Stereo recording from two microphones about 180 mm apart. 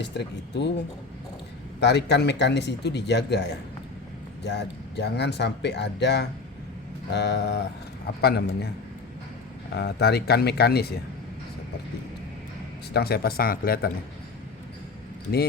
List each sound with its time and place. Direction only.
0.0 s speech: 70° left (ahead or behind)
1.8 s speech: 70° left (ahead or behind)
9.7 s speech: 65° left (ahead or behind)
12.9 s speech: 60° left (ahead or behind)